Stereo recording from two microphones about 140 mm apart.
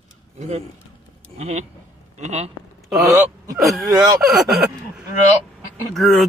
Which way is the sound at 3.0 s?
25° right (ahead or behind).